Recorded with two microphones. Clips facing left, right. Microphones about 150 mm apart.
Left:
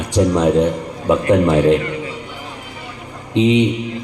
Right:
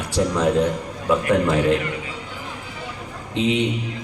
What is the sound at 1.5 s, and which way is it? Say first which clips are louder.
Speech: left 7 dB; 35° left (ahead or behind).